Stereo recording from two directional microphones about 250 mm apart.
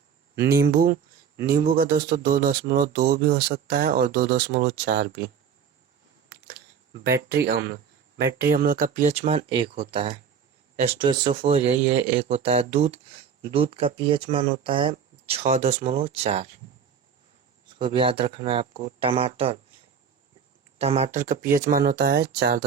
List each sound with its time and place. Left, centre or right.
0.3 s speech: right
7.0 s speech: right
17.7 s speech: centre
20.7 s speech: right